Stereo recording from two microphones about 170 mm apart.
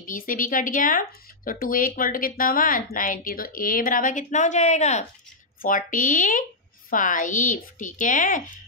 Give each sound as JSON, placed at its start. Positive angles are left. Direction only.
{"t": 0.0, "sound": "speech", "side_deg": 55}
{"t": 5.6, "sound": "speech", "side_deg": 55}